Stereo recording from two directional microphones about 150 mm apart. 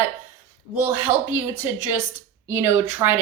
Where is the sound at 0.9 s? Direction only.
15° right (ahead or behind).